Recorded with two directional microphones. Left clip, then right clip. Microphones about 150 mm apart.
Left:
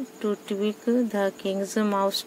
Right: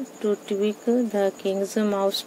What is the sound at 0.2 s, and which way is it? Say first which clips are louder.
Speech: right 4 dB; 35° left (ahead or behind).